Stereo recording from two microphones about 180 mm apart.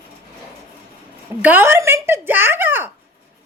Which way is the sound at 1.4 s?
10° right (ahead or behind).